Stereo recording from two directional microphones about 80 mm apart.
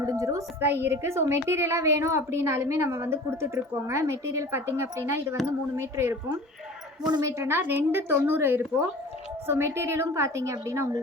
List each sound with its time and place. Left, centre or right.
0.0 s a sound: right
0.6 s a woman's voice: right
7.0 s a woman's voice: right
7.3 s a woman's voice: right